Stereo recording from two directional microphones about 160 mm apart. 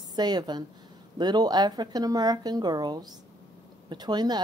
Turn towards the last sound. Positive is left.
turn(degrees=-25)  # may be behind; listen again after turning